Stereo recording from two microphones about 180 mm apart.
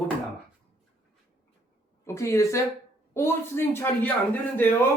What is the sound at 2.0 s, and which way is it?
Speech, 15° left (ahead or behind).